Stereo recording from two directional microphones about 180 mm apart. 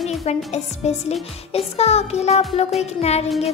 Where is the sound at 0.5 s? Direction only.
35° left (ahead or behind).